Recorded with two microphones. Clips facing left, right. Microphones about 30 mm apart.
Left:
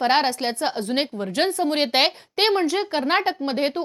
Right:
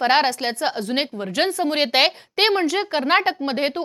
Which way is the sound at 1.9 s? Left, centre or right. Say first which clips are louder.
Right 2 dB; right.